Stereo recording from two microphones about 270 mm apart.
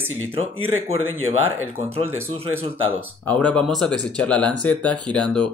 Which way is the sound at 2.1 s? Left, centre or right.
Centre.